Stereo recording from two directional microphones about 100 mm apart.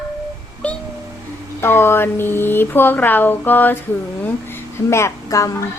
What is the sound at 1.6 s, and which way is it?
A woman's voice, 25° left (ahead or behind).